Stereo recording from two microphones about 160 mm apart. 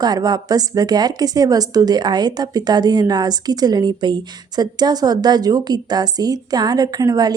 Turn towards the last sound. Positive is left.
turn(degrees=-25)  # may be behind; listen again after turning